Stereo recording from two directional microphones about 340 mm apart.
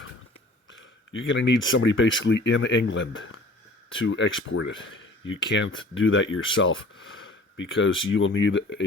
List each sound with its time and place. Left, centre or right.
0.7 s speech: left